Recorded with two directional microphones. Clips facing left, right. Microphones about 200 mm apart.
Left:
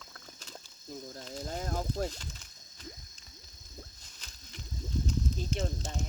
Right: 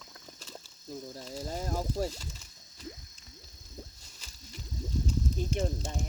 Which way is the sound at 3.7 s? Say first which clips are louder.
Right 3 dB; 10° right (ahead or behind).